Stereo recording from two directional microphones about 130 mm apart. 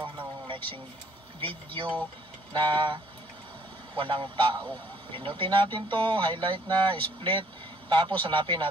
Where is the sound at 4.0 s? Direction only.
40° right (ahead or behind).